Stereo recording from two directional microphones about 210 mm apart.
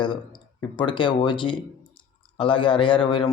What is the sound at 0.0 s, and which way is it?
Speech, 20° left (ahead or behind).